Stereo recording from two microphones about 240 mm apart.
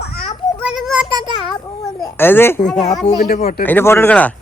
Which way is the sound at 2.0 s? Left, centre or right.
Centre.